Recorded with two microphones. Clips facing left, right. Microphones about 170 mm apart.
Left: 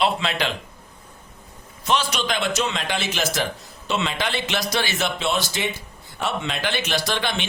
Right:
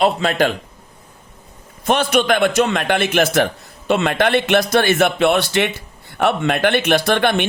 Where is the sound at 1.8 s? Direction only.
55° right (ahead or behind).